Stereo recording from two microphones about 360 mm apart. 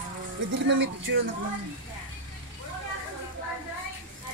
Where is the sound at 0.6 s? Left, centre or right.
Right.